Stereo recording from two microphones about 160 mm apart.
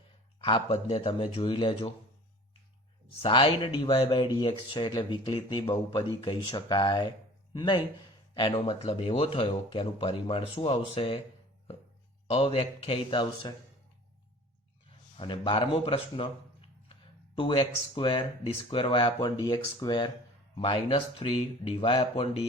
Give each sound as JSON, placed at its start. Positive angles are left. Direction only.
{"t": 0.4, "sound": "speech", "side_deg": 35}
{"t": 3.2, "sound": "speech", "side_deg": 35}
{"t": 12.3, "sound": "speech", "side_deg": 40}
{"t": 15.2, "sound": "speech", "side_deg": 30}